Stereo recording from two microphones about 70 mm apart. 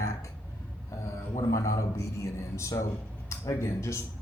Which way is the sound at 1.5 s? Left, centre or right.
Left.